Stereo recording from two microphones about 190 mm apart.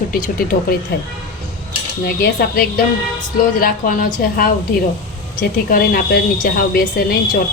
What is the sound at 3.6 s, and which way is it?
A woman's voice, 50° left (ahead or behind).